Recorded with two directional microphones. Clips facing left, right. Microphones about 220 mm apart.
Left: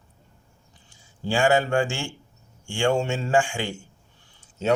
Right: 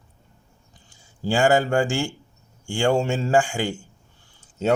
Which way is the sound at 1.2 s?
40° right (ahead or behind).